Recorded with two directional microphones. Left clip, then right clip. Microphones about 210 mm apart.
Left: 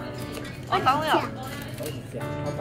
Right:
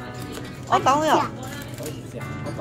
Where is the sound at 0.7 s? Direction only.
25° right (ahead or behind).